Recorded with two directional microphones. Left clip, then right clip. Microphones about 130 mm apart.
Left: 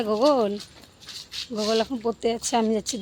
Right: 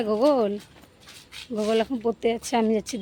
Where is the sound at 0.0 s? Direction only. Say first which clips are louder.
Even; 10° right (ahead or behind).